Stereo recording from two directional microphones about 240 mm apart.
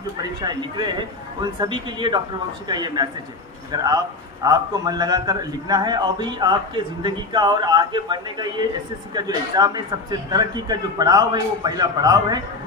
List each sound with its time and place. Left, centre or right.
0.2 s a man's voice: centre